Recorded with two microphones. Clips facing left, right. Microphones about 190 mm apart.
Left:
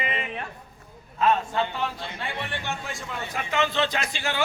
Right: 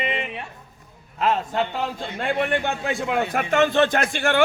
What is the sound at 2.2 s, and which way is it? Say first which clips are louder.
A man's voice: right 11 dB; 55° right (ahead or behind).